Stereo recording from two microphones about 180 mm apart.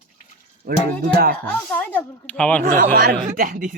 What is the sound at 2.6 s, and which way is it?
Speech, 55° right (ahead or behind).